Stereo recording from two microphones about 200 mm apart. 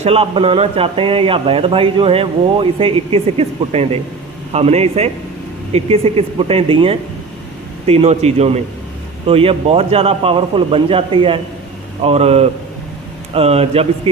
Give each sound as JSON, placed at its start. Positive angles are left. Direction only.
{"t": 0.0, "sound": "speech", "side_deg": -30}